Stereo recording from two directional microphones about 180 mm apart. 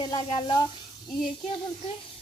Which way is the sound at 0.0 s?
25° left (ahead or behind).